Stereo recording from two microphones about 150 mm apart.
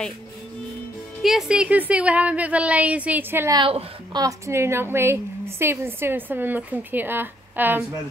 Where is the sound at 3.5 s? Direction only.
35° right (ahead or behind).